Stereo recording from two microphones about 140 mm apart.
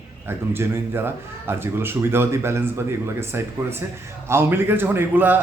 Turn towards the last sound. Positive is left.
turn(degrees=-15)  # may be behind; listen again after turning